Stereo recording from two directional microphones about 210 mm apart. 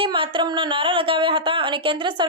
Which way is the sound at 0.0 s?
25° right (ahead or behind).